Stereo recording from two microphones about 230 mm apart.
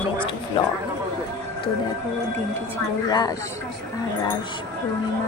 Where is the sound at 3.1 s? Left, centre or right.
Centre.